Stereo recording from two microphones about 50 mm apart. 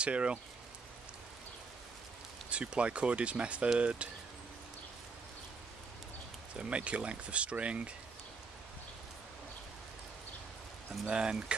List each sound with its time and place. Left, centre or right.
0.0 s speech: right
2.5 s speech: right
6.5 s speech: right
11.1 s speech: centre